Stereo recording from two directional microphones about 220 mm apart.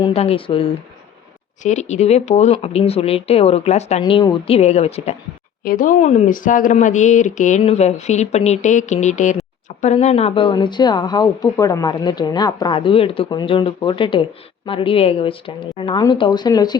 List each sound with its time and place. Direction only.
0.0 s speech: 25° left (ahead or behind)
5.6 s speech: 40° left (ahead or behind); by 16.7 s 20° left (ahead or behind)